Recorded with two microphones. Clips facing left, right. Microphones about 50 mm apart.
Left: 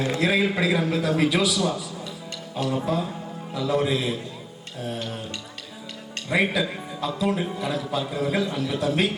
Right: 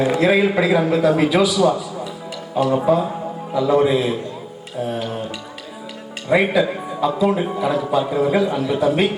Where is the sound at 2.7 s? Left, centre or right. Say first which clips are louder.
Right 9 dB; right.